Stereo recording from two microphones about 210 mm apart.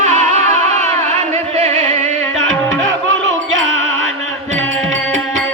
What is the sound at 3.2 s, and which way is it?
Music, 70° right (ahead or behind).